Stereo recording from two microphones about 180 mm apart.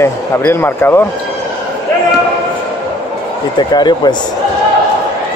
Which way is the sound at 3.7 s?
25° left (ahead or behind).